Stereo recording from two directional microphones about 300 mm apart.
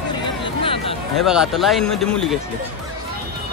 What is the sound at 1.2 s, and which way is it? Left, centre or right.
A man's voice, centre.